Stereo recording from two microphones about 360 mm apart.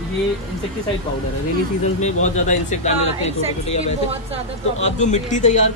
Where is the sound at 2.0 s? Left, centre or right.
Centre.